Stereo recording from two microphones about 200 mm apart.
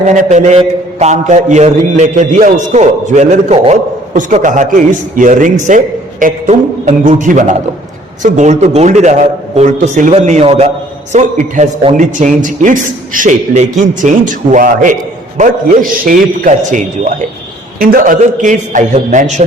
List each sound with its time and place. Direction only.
0.0 s a man's voice: 35° right (ahead or behind)